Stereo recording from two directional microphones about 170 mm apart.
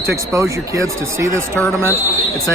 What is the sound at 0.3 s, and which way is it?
Speech, 15° right (ahead or behind).